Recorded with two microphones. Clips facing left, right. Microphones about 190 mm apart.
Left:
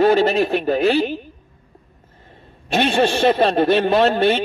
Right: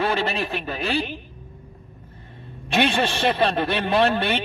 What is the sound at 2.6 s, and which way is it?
A man's voice, 45° left (ahead or behind).